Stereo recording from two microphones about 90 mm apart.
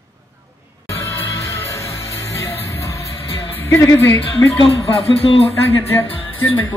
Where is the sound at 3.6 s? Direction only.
30° left (ahead or behind).